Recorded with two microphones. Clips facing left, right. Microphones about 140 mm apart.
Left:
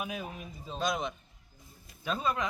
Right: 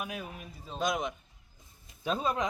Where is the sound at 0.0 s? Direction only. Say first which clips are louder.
Left 1 dB; centre (ahead or behind).